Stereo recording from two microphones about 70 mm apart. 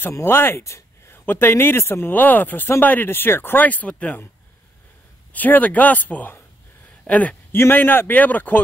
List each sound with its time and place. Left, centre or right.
0.1 s speech: left
5.3 s speech: left
7.5 s speech: left